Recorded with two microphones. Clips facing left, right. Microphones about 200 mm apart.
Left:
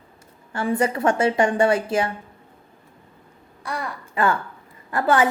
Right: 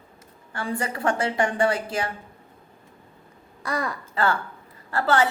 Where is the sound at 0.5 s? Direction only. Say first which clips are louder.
Left 7 dB; 25° left (ahead or behind).